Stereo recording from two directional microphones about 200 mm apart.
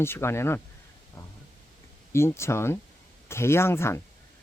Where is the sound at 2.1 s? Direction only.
15° left (ahead or behind).